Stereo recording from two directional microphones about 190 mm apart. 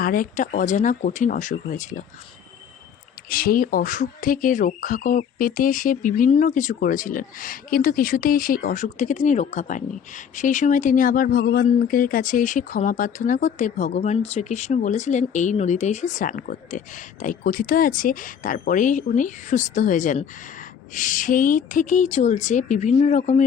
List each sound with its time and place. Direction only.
0.0 s speech: 45° left (ahead or behind)
3.2 s speech: 50° left (ahead or behind)